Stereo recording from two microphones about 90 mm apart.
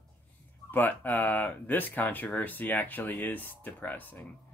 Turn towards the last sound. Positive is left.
turn(degrees=20)  # may be behind; listen again after turning